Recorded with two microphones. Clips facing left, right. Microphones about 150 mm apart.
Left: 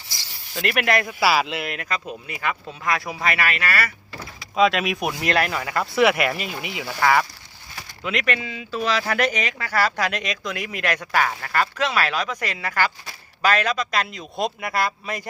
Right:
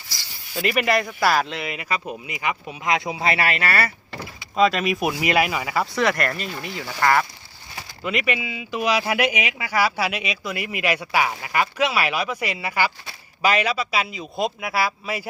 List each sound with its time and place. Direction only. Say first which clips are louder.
0.5 s speech: right 1 dB; centre (ahead or behind)
2.2 s speech: right 1 dB; 15° right (ahead or behind); by 3.9 s 30° right (ahead or behind)
4.5 s speech: even; centre (ahead or behind)